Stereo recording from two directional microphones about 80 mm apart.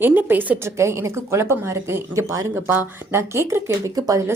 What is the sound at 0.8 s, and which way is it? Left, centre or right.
A woman's voice, right.